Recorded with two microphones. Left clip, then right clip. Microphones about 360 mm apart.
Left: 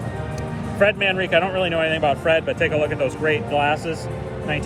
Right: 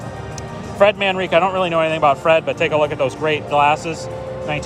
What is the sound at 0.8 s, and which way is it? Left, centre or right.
Speech, centre.